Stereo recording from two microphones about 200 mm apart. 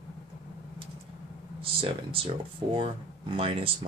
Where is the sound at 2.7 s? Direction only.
30° right (ahead or behind).